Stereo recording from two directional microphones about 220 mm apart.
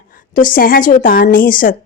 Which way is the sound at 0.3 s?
40° left (ahead or behind).